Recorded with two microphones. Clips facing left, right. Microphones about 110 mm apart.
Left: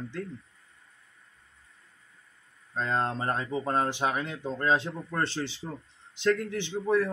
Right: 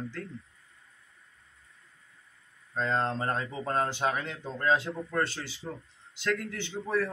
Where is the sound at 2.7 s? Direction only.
15° left (ahead or behind).